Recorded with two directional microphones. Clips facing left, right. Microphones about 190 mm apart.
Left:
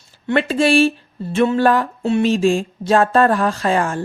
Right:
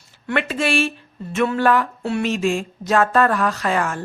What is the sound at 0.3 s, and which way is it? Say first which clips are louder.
Speech: left 6 dB; 30° left (ahead or behind).